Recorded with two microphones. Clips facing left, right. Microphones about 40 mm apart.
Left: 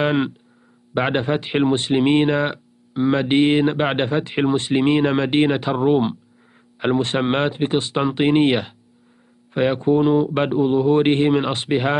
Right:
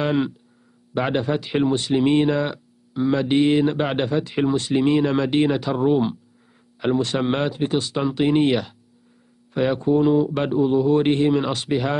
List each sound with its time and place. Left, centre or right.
0.0 s speech: left